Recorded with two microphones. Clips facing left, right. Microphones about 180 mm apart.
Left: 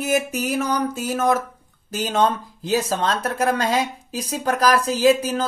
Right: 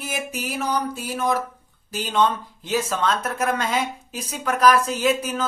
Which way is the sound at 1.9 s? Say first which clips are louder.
Left 1 dB; 45° left (ahead or behind).